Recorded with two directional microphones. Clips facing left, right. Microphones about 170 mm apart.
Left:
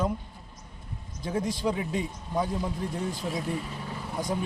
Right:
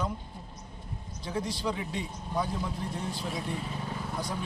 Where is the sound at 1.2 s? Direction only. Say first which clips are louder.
Left 4 dB; 45° left (ahead or behind).